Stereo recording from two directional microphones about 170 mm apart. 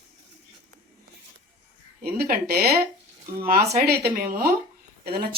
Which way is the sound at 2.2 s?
60° right (ahead or behind).